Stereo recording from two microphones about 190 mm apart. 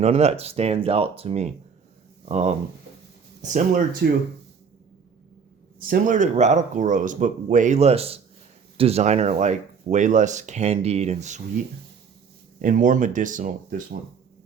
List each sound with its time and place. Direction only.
0.0 s speech: 35° right (ahead or behind)
4.0 s speech: 55° right (ahead or behind)
5.9 s speech: 40° right (ahead or behind)
12.6 s speech: 45° right (ahead or behind)